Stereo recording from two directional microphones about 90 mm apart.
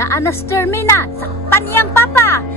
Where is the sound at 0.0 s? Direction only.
30° left (ahead or behind).